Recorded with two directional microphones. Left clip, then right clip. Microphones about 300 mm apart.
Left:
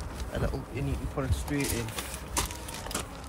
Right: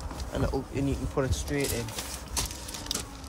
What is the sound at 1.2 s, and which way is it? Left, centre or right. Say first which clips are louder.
Speech: right 5 dB; right.